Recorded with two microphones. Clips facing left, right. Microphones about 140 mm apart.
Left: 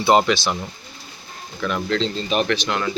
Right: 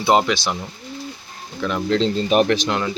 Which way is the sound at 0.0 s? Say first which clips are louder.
Left 1 dB; 15° right (ahead or behind).